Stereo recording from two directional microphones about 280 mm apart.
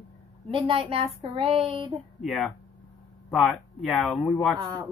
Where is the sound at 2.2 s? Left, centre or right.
Centre.